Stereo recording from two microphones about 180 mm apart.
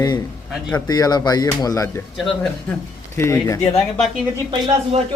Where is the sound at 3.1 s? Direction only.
15° left (ahead or behind).